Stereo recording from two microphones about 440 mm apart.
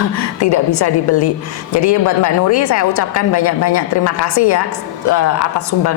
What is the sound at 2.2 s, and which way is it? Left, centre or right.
A woman's voice, left.